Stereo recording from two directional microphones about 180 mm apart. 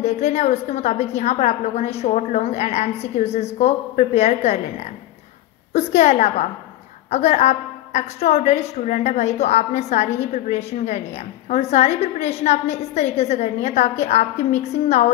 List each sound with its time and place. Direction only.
0.0 s a woman's voice: 40° left (ahead or behind)
5.7 s a woman's voice: 40° left (ahead or behind)